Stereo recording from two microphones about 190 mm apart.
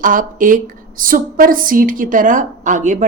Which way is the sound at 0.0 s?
45° right (ahead or behind).